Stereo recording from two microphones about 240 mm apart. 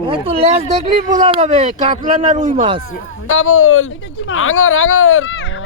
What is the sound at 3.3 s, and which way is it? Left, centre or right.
Speech, left.